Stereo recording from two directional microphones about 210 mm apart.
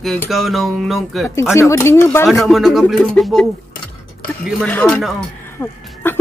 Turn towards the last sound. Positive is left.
turn(degrees=10)  # may be behind; listen again after turning